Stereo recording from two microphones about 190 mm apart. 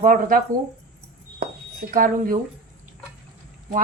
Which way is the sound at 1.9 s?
45° right (ahead or behind).